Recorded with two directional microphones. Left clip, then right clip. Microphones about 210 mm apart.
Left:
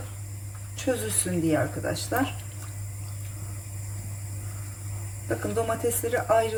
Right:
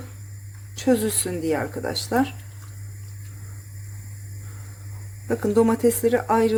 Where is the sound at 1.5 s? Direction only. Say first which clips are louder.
Right 2 dB; 50° right (ahead or behind).